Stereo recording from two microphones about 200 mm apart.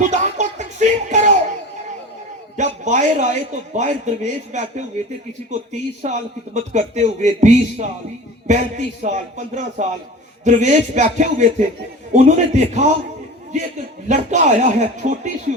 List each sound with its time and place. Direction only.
0.0 s music: 40° right (ahead or behind)
2.6 s a man's voice: 35° right (ahead or behind)
14.1 s a man's voice: 35° right (ahead or behind)